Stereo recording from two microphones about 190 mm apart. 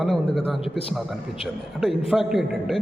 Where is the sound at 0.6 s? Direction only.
30° left (ahead or behind).